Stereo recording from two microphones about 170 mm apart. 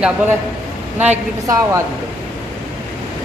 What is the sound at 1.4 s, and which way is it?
Speech, 20° right (ahead or behind).